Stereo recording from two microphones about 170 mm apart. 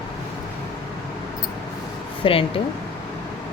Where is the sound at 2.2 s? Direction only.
30° left (ahead or behind).